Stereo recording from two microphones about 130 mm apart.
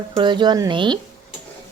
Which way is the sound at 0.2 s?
35° right (ahead or behind).